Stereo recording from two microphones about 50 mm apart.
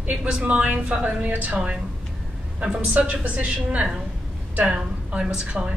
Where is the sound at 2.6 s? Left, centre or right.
Right.